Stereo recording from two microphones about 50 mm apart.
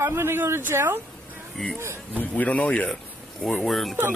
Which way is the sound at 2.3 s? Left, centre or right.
Left.